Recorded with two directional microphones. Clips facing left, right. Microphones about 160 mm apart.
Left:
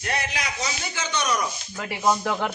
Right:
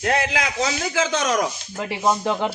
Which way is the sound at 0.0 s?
90° right.